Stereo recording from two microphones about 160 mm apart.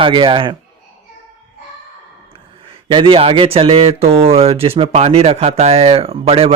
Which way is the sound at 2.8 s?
30° right (ahead or behind).